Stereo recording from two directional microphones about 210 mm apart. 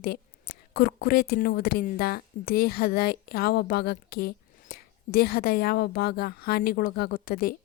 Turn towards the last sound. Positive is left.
turn(degrees=45)  # may be behind; listen again after turning